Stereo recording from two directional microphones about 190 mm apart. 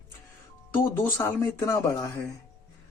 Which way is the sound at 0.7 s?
10° left (ahead or behind).